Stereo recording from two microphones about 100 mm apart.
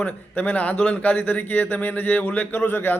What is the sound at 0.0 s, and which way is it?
Speech, 15° left (ahead or behind).